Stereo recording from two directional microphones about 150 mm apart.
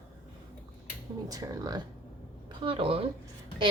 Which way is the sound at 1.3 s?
25° right (ahead or behind).